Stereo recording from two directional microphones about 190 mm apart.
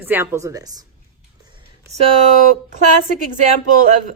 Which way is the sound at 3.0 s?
45° right (ahead or behind).